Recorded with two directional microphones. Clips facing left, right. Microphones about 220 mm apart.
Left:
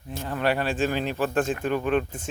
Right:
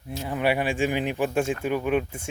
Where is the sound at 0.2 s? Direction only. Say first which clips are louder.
Right 1 dB; 10° right (ahead or behind).